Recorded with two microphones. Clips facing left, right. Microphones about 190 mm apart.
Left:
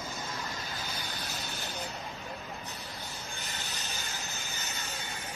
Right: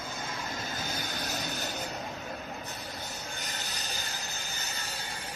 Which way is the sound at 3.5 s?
40° right (ahead or behind).